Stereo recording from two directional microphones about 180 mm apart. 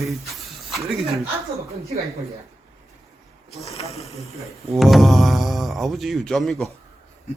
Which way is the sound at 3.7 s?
35° left (ahead or behind).